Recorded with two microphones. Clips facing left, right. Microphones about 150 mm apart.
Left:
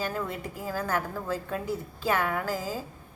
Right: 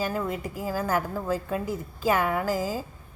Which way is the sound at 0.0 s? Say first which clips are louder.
Right 3 dB; 10° right (ahead or behind).